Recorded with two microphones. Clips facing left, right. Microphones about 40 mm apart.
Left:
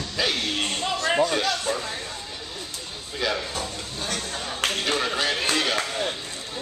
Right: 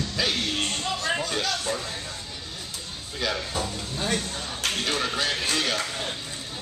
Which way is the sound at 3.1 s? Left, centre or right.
Centre.